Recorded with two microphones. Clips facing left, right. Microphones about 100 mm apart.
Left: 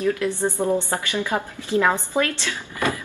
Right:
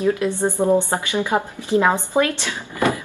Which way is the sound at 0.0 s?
20° right (ahead or behind).